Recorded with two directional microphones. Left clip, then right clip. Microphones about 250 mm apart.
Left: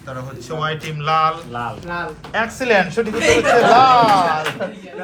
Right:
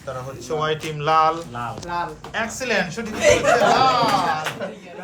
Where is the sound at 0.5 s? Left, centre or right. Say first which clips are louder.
Even; centre.